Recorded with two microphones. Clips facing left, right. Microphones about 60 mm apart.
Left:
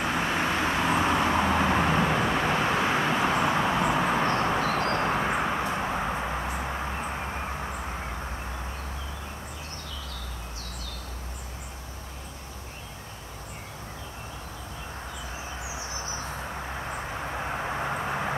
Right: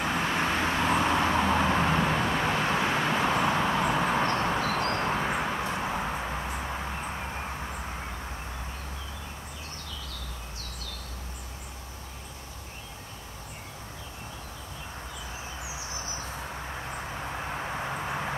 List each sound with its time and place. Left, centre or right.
0.0 s vehicle: centre
17.1 s vehicle: centre